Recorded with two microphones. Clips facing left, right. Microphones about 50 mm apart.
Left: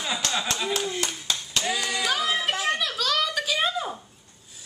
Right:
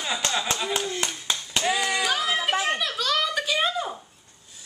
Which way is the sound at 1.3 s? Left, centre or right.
Centre.